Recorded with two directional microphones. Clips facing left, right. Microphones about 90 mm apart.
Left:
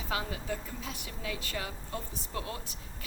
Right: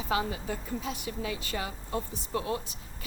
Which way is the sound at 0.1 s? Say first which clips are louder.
Right 4 dB; 25° right (ahead or behind).